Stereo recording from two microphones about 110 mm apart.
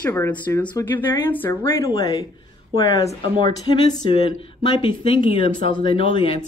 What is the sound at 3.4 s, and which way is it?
Speech, 40° left (ahead or behind).